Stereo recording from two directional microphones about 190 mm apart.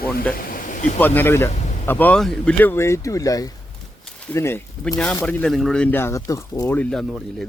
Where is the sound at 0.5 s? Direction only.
40° left (ahead or behind).